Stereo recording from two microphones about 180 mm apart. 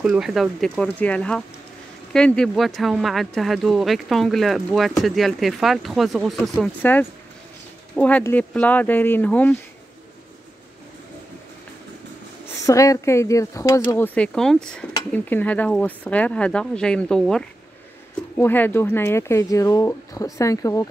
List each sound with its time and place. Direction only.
0.0 s speech: 5° right (ahead or behind)
12.6 s speech: 20° left (ahead or behind)